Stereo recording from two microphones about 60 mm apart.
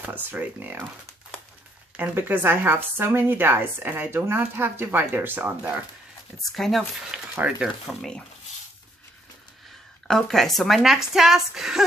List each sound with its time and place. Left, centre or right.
0.0 s speech: right
2.0 s a woman's voice: right
6.5 s speech: centre
7.3 s speech: right
7.9 s speech: centre
10.0 s speech: centre